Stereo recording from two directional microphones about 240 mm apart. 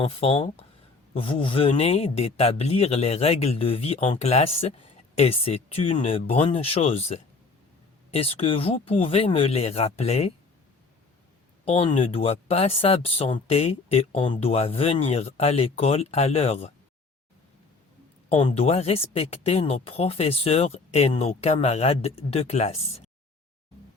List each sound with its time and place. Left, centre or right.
0.0 s speech: left
11.6 s speech: left
18.3 s speech: left